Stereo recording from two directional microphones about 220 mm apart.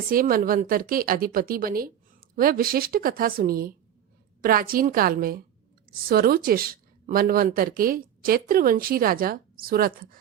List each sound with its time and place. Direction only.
0.1 s speech: 40° right (ahead or behind)